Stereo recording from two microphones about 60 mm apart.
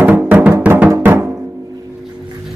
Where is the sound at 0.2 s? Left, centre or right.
Right.